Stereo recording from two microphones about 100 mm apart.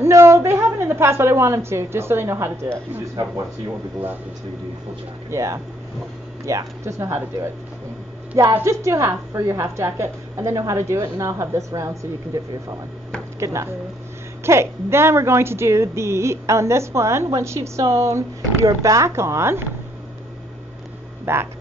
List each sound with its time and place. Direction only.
0.0 s a woman's voice: 25° right (ahead or behind)
5.3 s a woman's voice: 30° right (ahead or behind)
8.5 s a woman's voice: 30° right (ahead or behind)
21.3 s a woman's voice: 25° right (ahead or behind)